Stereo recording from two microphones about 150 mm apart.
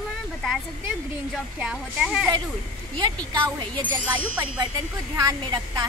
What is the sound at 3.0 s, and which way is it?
A woman's voice, 30° right (ahead or behind).